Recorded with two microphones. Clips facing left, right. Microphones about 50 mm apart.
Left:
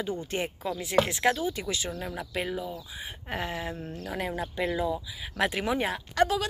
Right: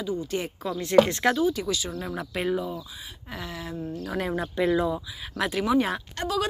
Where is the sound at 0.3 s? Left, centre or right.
Left.